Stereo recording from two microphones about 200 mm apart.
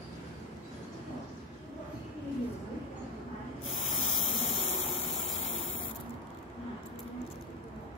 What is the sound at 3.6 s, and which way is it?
Spray, 35° left (ahead or behind).